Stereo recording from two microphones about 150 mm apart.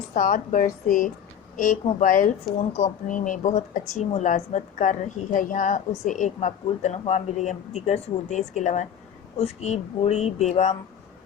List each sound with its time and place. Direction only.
0.1 s speech: 60° left (ahead or behind)
2.6 s speech: 50° left (ahead or behind)